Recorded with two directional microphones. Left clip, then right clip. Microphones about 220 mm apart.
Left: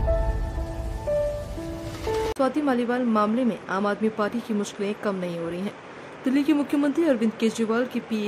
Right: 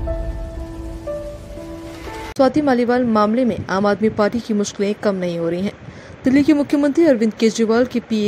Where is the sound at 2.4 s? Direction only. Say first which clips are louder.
Right 12 dB; 20° right (ahead or behind).